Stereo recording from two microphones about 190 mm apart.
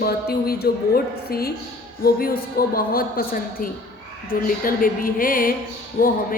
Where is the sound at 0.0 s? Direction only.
55° left (ahead or behind).